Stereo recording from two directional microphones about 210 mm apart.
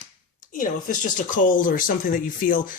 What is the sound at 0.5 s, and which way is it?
Speech, 40° left (ahead or behind).